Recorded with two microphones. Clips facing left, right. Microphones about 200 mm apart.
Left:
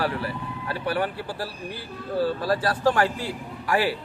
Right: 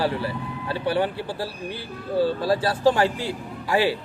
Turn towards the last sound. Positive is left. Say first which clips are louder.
# right 2 dB
turn(degrees=-25)  # may be behind; listen again after turning